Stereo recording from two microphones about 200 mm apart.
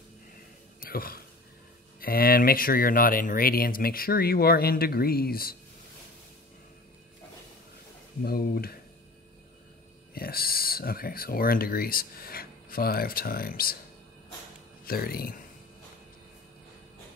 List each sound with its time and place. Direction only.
0.7 s a sound: 45° left (ahead or behind)
2.0 s speech: 45° left (ahead or behind)
8.2 s speech: 45° left (ahead or behind)
10.1 s speech: 50° left (ahead or behind)
14.9 s speech: 50° left (ahead or behind)